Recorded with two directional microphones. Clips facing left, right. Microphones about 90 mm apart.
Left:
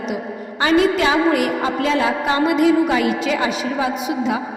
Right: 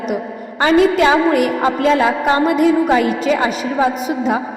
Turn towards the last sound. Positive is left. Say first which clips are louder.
# right 4 dB
turn(degrees=-45)  # may be behind; listen again after turning